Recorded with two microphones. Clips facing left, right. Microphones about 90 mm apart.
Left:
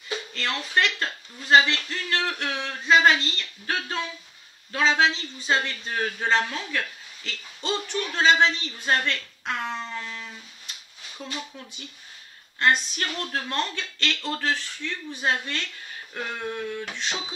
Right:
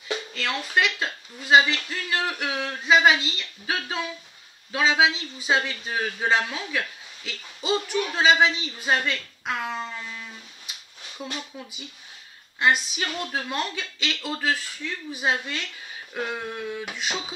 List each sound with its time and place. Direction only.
0.3 s a man's voice: 5° right (ahead or behind)
12.5 s a man's voice: 5° right (ahead or behind)